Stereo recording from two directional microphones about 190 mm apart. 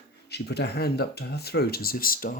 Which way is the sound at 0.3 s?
60° left (ahead or behind).